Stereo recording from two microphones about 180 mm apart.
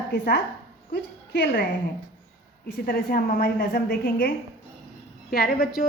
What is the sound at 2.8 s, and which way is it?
A woman's voice, 55° left (ahead or behind).